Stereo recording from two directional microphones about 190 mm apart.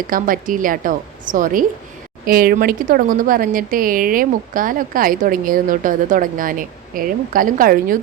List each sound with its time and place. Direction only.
0.1 s speech: 45° right (ahead or behind)